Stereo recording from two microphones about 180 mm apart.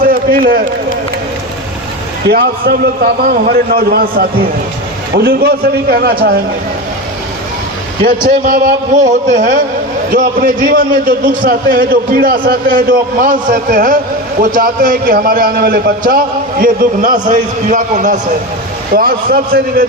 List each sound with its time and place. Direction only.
0.0 s run: 55° right (ahead or behind)
2.3 s a man's voice: 55° right (ahead or behind)
8.0 s a man's voice: 50° right (ahead or behind)
18.9 s a man's voice: 55° right (ahead or behind)